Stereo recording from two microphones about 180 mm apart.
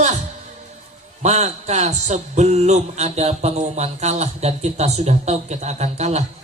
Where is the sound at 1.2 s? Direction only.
40° right (ahead or behind).